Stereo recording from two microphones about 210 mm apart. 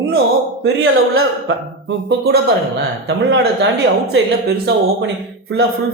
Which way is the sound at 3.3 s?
70° right (ahead or behind).